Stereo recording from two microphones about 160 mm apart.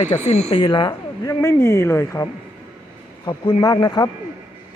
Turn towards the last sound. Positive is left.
turn(degrees=25)  # may be behind; listen again after turning